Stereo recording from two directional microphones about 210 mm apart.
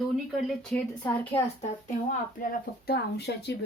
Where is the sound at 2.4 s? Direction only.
45° left (ahead or behind).